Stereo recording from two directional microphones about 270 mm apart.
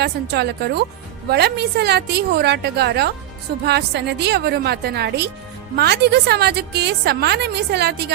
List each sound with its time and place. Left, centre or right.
0.0 s a woman's voice: right